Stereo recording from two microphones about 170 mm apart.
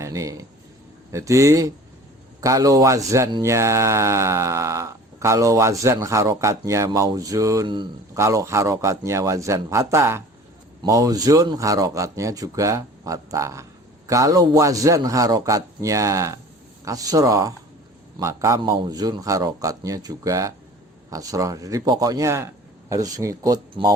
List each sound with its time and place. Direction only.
0.0 s speech: 20° right (ahead or behind)